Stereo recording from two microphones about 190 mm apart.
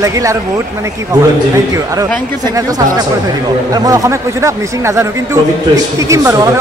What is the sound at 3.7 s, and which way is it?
Speech, 20° right (ahead or behind).